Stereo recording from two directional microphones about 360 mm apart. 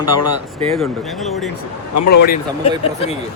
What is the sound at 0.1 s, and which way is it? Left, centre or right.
Speech, left.